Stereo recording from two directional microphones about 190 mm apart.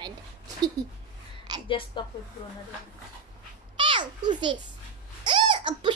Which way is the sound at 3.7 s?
25° right (ahead or behind).